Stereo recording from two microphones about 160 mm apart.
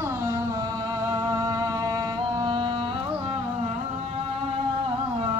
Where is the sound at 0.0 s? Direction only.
15° right (ahead or behind); by 3.7 s 35° right (ahead or behind).